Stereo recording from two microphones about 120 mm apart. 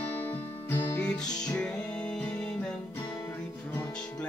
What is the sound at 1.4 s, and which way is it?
Music, 5° left (ahead or behind).